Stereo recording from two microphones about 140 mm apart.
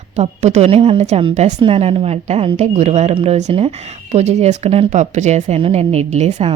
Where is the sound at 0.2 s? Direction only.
55° right (ahead or behind).